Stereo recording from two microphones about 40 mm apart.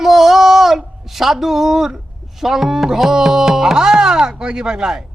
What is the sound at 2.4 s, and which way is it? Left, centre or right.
Music, centre.